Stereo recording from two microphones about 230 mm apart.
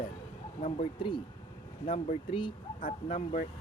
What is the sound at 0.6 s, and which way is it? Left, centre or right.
Speech, left.